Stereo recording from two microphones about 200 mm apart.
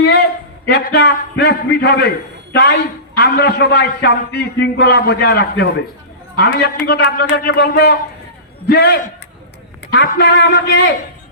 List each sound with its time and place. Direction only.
0.0 s a sound: 55° left (ahead or behind)
0.7 s a man's voice: 55° left (ahead or behind)
10.2 s a man's voice: 55° left (ahead or behind)